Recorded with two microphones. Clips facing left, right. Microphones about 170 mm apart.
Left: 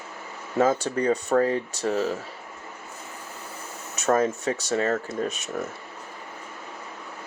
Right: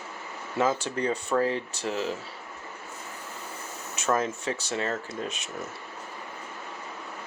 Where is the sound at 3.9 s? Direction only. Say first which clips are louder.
Left 5 dB; 40° left (ahead or behind).